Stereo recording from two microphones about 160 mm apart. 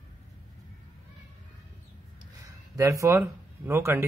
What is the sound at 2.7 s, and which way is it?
Speech, 20° right (ahead or behind).